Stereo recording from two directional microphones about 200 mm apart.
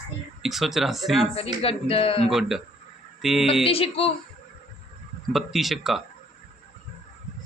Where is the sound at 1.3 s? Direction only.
30° left (ahead or behind).